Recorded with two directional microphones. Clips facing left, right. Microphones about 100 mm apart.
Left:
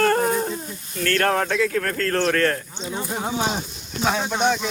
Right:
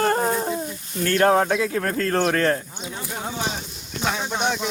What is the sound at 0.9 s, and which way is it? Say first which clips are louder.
Speech: right 3 dB; 20° right (ahead or behind).